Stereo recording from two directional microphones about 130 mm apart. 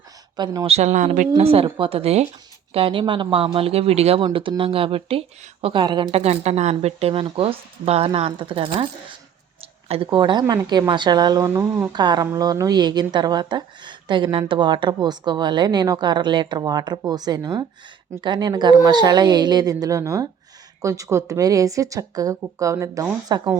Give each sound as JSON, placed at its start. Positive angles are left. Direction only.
{"t": 0.3, "sound": "a woman's voice", "side_deg": -35}
{"t": 0.7, "sound": "speech", "side_deg": -60}
{"t": 1.4, "sound": "speech", "side_deg": -50}
{"t": 4.2, "sound": "a woman's voice", "side_deg": -40}
{"t": 6.1, "sound": "a woman's voice", "side_deg": -55}
{"t": 11.9, "sound": "a woman's voice", "side_deg": -35}